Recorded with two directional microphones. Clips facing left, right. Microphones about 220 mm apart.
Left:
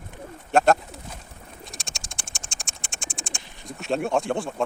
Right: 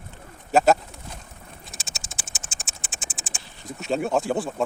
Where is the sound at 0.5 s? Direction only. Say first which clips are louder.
Right 1 dB; 5° right (ahead or behind).